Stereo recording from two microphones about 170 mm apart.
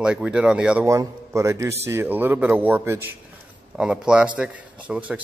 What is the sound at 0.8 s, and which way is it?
Speech, 20° right (ahead or behind).